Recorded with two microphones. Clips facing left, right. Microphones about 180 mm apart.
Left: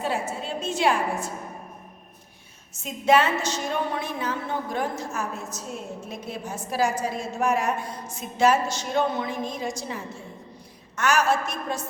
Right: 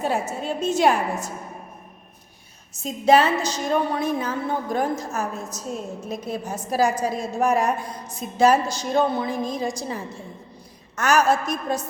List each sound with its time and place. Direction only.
0.0 s a woman's voice: 45° right (ahead or behind)
2.8 s a woman's voice: 35° right (ahead or behind)